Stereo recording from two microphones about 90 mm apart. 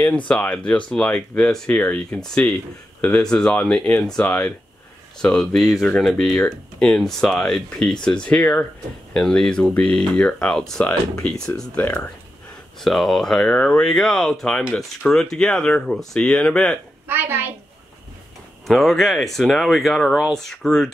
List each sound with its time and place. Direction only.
0.3 s speech: 15° left (ahead or behind)
11.8 s speech: 20° left (ahead or behind)
12.8 s speech: centre (ahead or behind)
17.1 s a woman's voice: 20° right (ahead or behind)
18.7 s speech: centre (ahead or behind)